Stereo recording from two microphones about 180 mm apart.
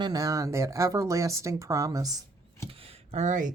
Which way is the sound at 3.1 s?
40° right (ahead or behind).